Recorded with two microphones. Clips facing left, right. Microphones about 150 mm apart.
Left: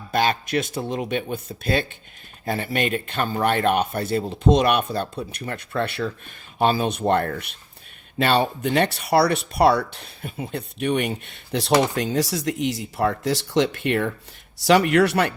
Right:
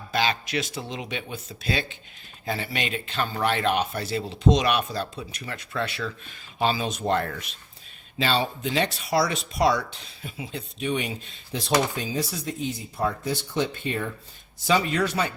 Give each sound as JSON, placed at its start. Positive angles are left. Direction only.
{"t": 0.1, "sound": "speech", "side_deg": 50}